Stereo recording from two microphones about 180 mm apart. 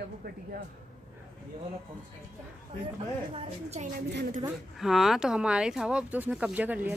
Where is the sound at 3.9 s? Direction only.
60° right (ahead or behind).